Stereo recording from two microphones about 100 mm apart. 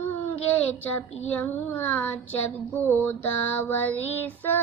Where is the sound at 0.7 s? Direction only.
15° left (ahead or behind).